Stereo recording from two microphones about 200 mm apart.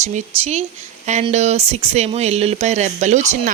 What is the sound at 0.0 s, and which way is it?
Speech, 35° right (ahead or behind).